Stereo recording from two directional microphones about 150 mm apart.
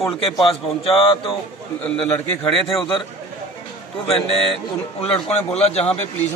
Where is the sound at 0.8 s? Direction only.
35° left (ahead or behind).